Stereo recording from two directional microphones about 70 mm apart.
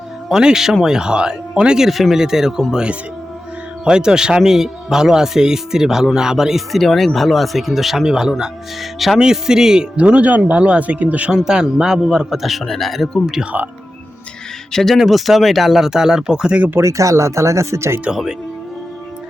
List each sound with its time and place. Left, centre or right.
0.3 s a man's voice: centre
13.4 s speech: right
14.7 s a man's voice: centre
16.8 s speech: right